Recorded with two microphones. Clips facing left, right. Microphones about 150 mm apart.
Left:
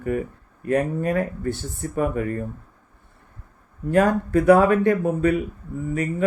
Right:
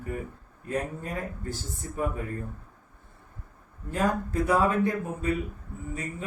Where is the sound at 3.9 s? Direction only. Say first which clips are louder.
Left 9 dB; 70° left (ahead or behind).